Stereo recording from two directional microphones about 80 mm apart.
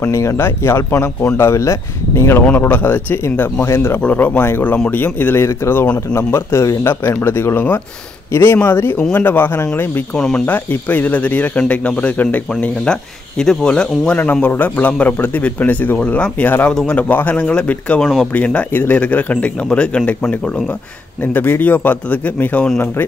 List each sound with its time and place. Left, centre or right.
0.0 s speech: left
2.7 s speech: left
4.0 s speech: centre
10.1 s speech: centre
10.4 s speech: left
12.8 s speech: centre
14.1 s speech: left
21.2 s speech: left